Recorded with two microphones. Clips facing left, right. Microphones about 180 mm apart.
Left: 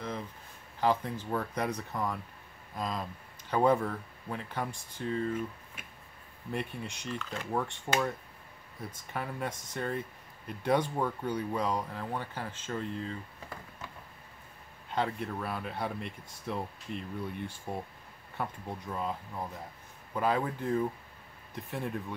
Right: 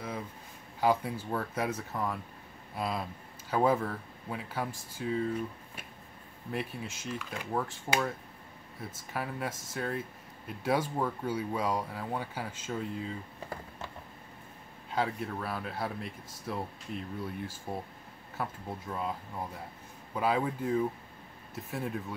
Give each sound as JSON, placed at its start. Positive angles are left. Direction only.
{"t": 0.7, "sound": "speech", "side_deg": -10}
{"t": 6.5, "sound": "speech", "side_deg": 0}
{"t": 9.1, "sound": "speech", "side_deg": -5}
{"t": 14.9, "sound": "speech", "side_deg": -5}
{"t": 20.2, "sound": "speech", "side_deg": -5}